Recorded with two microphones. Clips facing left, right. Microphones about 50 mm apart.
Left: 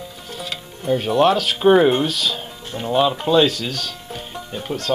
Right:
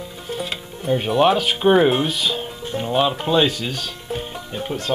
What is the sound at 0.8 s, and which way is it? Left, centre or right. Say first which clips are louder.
Speech: left 1 dB; centre.